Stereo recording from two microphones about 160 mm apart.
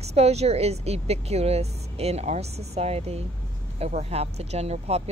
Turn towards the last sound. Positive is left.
turn(degrees=-40)  # may be behind; listen again after turning